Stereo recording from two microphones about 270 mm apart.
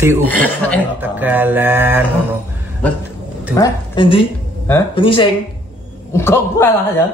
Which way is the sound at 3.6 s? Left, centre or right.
Centre.